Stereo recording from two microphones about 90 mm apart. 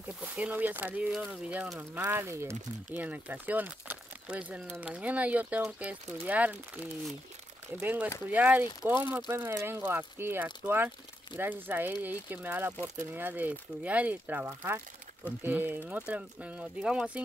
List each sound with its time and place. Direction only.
0.0 s speech: 15° right (ahead or behind)
2.9 s speech: 20° right (ahead or behind)